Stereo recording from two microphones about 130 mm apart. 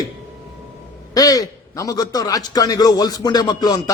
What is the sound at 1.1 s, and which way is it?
A man's voice, 30° left (ahead or behind).